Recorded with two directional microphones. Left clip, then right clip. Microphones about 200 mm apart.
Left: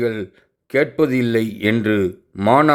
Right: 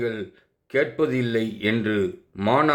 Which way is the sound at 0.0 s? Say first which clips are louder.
Left 6 dB; 35° left (ahead or behind).